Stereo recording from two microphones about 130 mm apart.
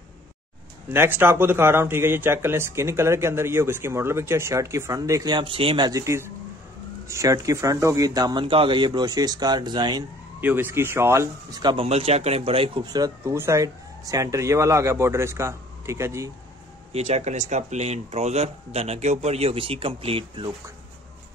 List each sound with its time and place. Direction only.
0.8 s speech: 15° right (ahead or behind); by 5.9 s 40° right (ahead or behind)
5.9 s speech: 25° right (ahead or behind)
8.5 s speech: 40° right (ahead or behind)
10.4 s speech: 15° right (ahead or behind)
11.8 s speech: 55° right (ahead or behind)
12.9 s speech: 25° right (ahead or behind)
16.9 s speech: 55° right (ahead or behind)